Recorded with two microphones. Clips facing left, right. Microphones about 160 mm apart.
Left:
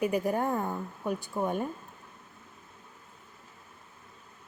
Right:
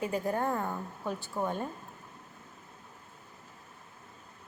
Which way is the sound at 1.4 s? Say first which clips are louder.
Left 2 dB; 5° left (ahead or behind).